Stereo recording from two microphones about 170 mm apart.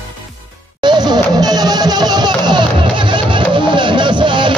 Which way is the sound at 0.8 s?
25° right (ahead or behind).